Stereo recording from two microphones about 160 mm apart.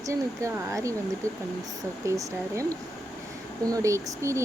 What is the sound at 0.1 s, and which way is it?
Speech, 20° right (ahead or behind).